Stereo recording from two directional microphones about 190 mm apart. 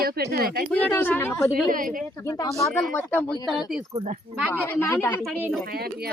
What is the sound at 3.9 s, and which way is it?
Speech, 35° right (ahead or behind).